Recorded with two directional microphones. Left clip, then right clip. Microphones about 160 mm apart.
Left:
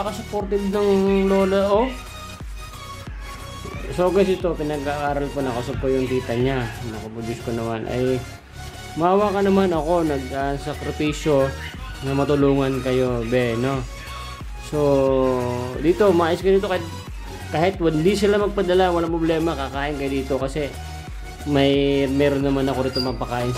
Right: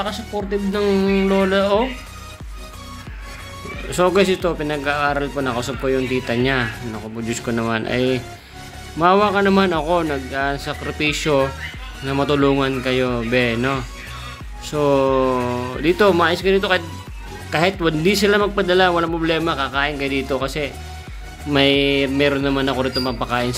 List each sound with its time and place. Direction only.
0.9 s speech: 15° left (ahead or behind)
3.9 s speech: centre (ahead or behind)